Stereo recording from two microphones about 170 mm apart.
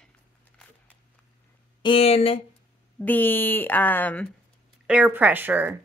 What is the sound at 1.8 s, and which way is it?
Speech, 35° left (ahead or behind).